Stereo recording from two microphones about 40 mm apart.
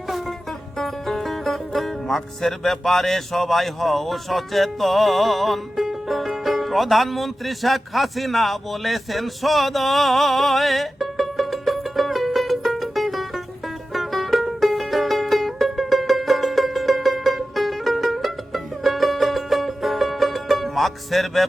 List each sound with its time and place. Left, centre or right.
0.8 s music: centre